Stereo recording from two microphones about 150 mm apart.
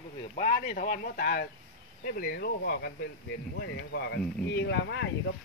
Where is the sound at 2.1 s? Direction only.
85° left.